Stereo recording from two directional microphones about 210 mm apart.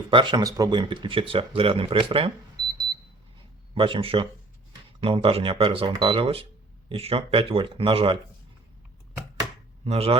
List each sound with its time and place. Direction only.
0.1 s speech: 20° right (ahead or behind)
3.8 s speech: 25° right (ahead or behind)
9.8 s speech: 30° right (ahead or behind)